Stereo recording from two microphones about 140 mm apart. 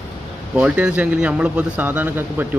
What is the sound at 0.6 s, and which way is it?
Speech, 10° right (ahead or behind).